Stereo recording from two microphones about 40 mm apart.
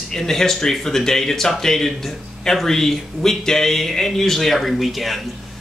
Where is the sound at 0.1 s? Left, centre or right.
Centre.